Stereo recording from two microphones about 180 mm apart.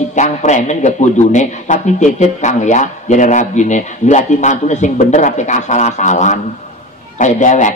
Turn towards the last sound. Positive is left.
turn(degrees=45)  # may be behind; listen again after turning